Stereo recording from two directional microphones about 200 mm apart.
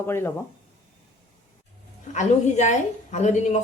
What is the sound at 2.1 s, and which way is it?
A woman's voice, 35° left (ahead or behind).